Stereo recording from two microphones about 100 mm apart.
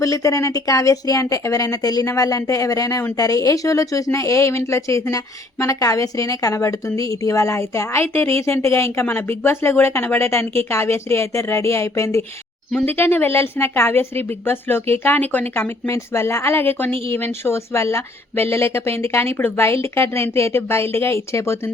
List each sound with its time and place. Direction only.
0.0 s a woman's voice: 35° left (ahead or behind)